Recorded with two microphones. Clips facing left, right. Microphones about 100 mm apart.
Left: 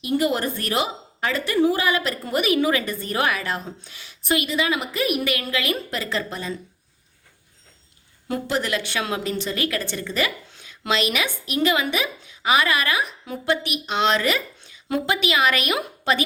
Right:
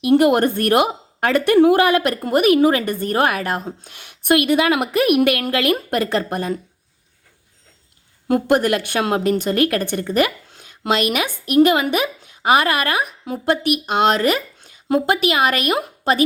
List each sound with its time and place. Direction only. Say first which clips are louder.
0.0 s a woman's voice: right 8 dB; 70° right (ahead or behind)
8.3 s a woman's voice: right 8 dB; 55° right (ahead or behind)